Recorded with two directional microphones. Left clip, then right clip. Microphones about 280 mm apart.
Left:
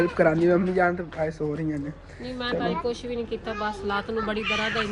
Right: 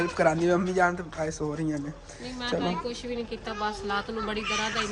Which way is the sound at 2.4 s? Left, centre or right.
Centre.